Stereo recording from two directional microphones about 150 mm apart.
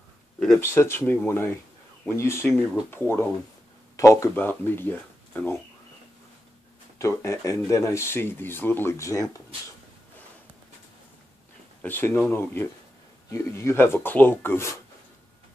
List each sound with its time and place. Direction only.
0.6 s speech: 15° left (ahead or behind)
7.0 s speech: 20° left (ahead or behind)
11.8 s speech: 15° left (ahead or behind)